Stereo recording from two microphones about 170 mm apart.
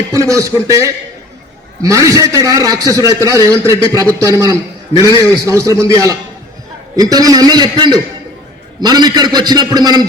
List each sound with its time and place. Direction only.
0.1 s a man's voice: 20° right (ahead or behind)